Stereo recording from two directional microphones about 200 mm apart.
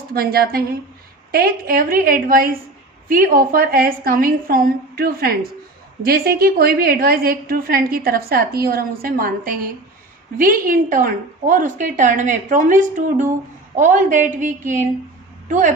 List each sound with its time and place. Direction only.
0.1 s a woman's voice: 50° right (ahead or behind)